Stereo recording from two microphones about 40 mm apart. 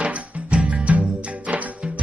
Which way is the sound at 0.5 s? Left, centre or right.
Right.